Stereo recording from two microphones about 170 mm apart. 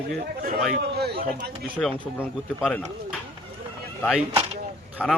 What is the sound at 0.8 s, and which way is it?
Speech, 70° right (ahead or behind).